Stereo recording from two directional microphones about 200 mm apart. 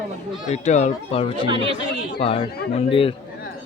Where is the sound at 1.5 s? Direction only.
25° right (ahead or behind).